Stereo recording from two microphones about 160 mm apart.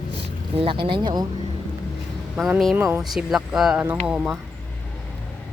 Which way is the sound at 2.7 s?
15° right (ahead or behind).